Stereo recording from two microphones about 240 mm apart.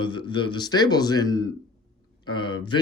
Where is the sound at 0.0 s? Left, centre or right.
Centre.